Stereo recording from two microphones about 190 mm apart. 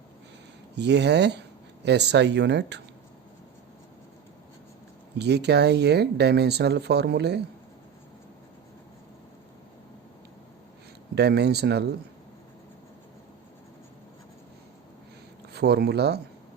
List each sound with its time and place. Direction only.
0.8 s speech: 65° right (ahead or behind)
5.1 s speech: 60° right (ahead or behind)
11.1 s speech: 60° right (ahead or behind)
15.5 s speech: 60° right (ahead or behind)